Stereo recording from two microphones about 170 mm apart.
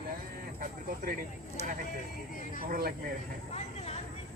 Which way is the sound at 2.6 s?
60° right (ahead or behind).